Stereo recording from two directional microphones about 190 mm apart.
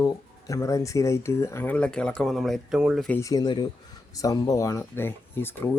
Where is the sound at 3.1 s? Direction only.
20° left (ahead or behind).